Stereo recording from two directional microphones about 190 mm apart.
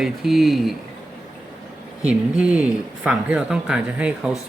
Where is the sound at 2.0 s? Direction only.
5° right (ahead or behind).